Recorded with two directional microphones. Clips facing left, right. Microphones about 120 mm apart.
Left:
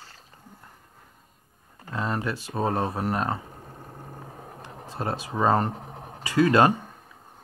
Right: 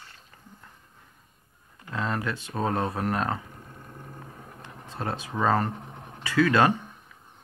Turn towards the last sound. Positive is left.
turn(degrees=40)  # may be behind; listen again after turning